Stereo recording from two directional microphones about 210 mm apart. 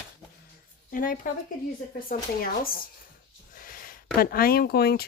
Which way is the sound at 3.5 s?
40° left (ahead or behind).